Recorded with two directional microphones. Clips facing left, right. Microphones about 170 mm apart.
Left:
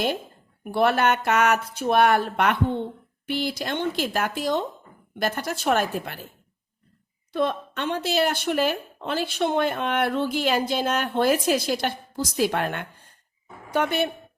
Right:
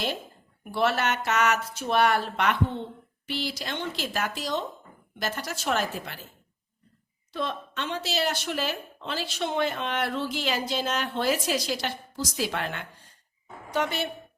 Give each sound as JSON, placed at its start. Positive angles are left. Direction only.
{"t": 0.6, "sound": "a woman's voice", "side_deg": 55}
{"t": 7.3, "sound": "a woman's voice", "side_deg": 55}